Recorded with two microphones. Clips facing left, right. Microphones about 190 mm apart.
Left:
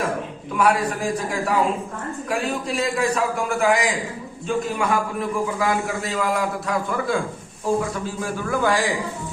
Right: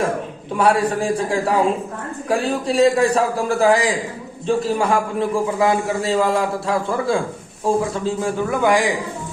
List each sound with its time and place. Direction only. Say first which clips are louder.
0.5 s a man's voice: right 3 dB; 30° right (ahead or behind)